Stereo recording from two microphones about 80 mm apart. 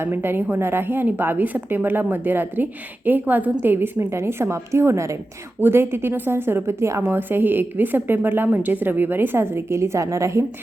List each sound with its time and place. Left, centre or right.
0.0 s a woman's voice: right
7.1 s a woman's voice: right